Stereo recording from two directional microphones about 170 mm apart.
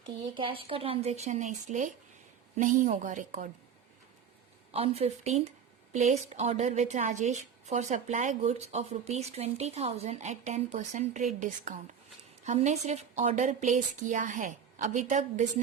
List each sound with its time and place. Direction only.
0.0 s a woman's voice: 30° right (ahead or behind); by 3.5 s 50° right (ahead or behind)
4.7 s a woman's voice: 35° right (ahead or behind)